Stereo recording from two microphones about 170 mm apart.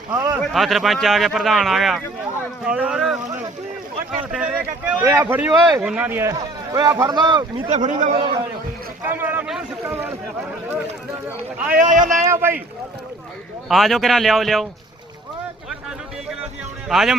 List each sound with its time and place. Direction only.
0.1 s a man's voice: 20° right (ahead or behind)
0.4 s speech: centre (ahead or behind)
4.3 s speech: 5° right (ahead or behind)
6.3 s a man's voice: 25° right (ahead or behind)
7.7 s speech: 45° right (ahead or behind)
8.2 s a man's voice: 25° right (ahead or behind)
9.0 s a sound: 10° right (ahead or behind)
11.7 s speech: 50° right (ahead or behind)
12.3 s speech: 15° right (ahead or behind)
13.7 s speech: centre (ahead or behind)
16.9 s speech: centre (ahead or behind)